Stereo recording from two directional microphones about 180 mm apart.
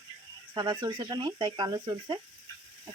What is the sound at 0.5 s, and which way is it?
Speech, 25° right (ahead or behind).